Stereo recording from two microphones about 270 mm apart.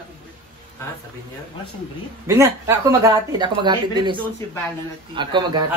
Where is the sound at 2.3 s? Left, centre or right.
Centre.